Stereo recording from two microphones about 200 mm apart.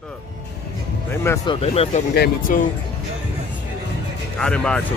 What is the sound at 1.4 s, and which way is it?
Speech, 25° left (ahead or behind).